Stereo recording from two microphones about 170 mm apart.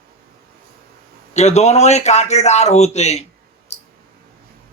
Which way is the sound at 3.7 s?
40° left (ahead or behind).